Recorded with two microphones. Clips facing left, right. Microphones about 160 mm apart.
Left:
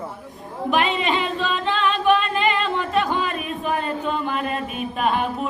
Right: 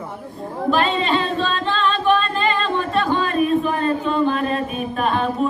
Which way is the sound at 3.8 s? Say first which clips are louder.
Right 6 dB; 15° left (ahead or behind).